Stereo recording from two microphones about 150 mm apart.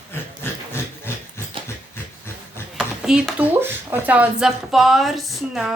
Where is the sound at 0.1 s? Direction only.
15° left (ahead or behind).